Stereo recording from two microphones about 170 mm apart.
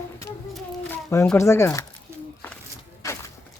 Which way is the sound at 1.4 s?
15° left (ahead or behind).